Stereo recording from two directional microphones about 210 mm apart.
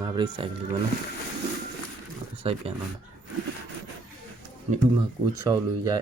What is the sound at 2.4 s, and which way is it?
Speech, 25° right (ahead or behind).